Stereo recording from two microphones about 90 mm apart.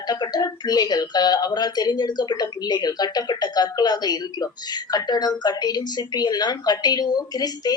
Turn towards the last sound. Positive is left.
turn(degrees=45)  # may be behind; listen again after turning